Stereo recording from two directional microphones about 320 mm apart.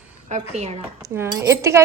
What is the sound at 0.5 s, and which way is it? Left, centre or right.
Speech, centre.